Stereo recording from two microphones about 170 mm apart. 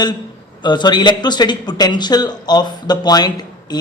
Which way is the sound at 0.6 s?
25° left (ahead or behind).